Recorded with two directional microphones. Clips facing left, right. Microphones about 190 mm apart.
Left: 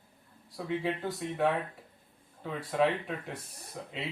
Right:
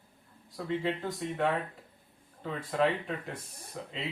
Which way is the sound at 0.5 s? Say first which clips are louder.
Even; 5° left (ahead or behind).